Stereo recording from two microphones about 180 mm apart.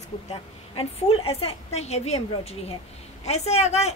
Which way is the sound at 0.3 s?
35° left (ahead or behind).